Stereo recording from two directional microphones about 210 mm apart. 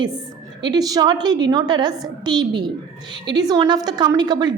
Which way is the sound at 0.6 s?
20° right (ahead or behind).